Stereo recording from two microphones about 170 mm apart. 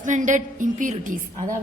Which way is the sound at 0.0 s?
50° right (ahead or behind).